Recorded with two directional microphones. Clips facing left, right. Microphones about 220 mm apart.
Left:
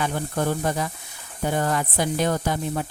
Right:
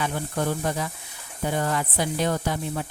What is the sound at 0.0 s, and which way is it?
A woman's voice, 45° left (ahead or behind).